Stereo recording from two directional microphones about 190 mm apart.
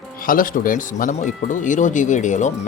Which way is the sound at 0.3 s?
45° left (ahead or behind).